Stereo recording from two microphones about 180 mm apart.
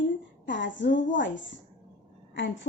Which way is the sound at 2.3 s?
90° left.